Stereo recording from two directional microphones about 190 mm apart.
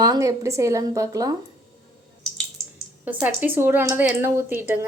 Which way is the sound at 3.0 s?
10° right (ahead or behind).